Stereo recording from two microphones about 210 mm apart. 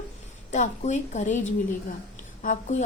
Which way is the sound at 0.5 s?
35° left (ahead or behind).